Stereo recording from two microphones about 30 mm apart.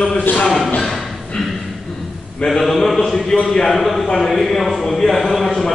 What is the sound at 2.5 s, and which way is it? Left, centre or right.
A man's voice, centre.